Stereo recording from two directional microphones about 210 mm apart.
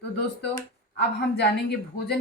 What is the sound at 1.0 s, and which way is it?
A woman's voice, 50° left (ahead or behind).